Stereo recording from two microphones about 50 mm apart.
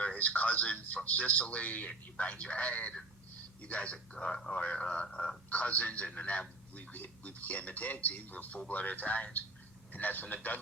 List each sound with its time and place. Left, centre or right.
0.0 s speech: left
5.5 s a man's voice: left